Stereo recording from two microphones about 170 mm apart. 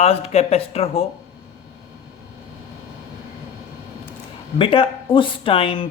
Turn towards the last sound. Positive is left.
turn(degrees=30)  # may be behind; listen again after turning